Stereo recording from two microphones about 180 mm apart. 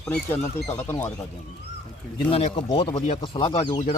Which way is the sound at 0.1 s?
15° left (ahead or behind).